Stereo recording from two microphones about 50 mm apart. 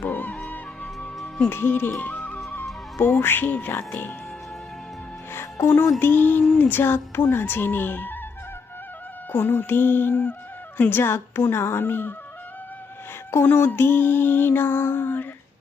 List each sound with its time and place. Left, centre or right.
0.0 s music: left
1.5 s speech: left
1.9 s speech: left
3.0 s speech: left
5.5 s speech: left
6.0 s music: left
6.6 s speech: left
9.3 s speech: left
11.0 s speech: left
13.4 s speech: left